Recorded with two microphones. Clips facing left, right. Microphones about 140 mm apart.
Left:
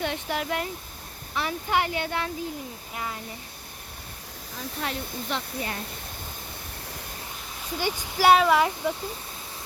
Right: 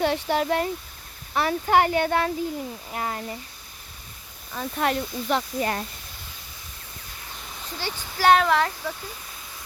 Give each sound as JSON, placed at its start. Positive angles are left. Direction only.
{"t": 0.0, "sound": "speech", "side_deg": -35}
{"t": 1.3, "sound": "speech", "side_deg": -50}
{"t": 4.5, "sound": "speech", "side_deg": -70}
{"t": 5.3, "sound": "speech", "side_deg": -55}
{"t": 7.7, "sound": "speech", "side_deg": 15}